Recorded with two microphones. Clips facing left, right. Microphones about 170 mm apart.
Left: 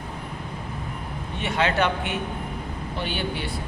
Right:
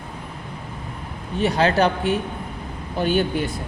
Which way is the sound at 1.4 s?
35° right (ahead or behind).